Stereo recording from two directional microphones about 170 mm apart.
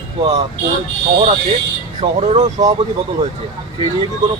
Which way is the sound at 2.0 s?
40° right (ahead or behind).